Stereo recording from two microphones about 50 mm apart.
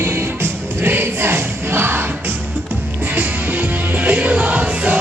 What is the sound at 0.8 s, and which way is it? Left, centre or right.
Choir, right.